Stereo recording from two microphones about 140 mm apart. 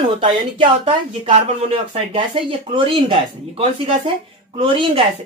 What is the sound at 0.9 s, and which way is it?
Speech, 50° right (ahead or behind).